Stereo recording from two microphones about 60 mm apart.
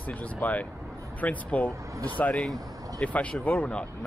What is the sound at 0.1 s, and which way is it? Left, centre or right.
Speech, left.